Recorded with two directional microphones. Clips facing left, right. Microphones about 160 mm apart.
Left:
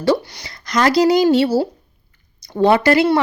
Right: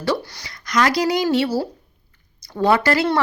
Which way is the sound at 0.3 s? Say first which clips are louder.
Left 1 dB; 30° left (ahead or behind).